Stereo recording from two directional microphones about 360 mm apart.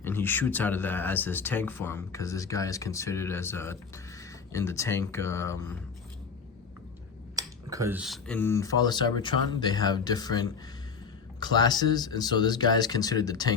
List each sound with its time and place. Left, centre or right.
0.0 s speech: centre
7.3 s speech: centre